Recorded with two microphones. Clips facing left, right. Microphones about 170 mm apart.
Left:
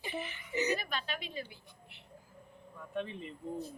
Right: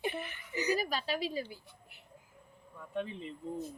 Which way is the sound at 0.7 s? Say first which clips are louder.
Right 4 dB; 35° right (ahead or behind).